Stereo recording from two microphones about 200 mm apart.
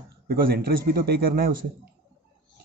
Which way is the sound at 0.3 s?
50° right (ahead or behind).